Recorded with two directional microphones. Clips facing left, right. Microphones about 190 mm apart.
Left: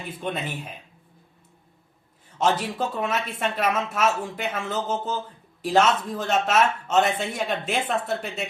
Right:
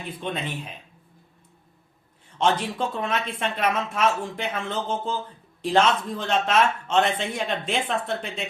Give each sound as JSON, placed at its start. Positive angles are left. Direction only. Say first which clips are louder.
{"t": 0.2, "sound": "speech", "louder": "left 1 dB", "side_deg": 5}
{"t": 2.4, "sound": "speech", "louder": "even", "side_deg": 5}